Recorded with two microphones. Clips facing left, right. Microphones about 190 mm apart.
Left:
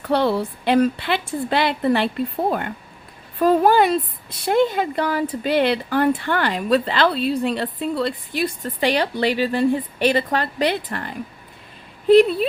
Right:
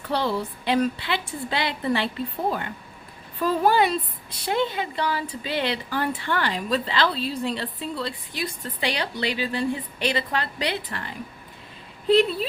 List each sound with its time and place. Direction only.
0.1 s a woman's voice: 60° left (ahead or behind)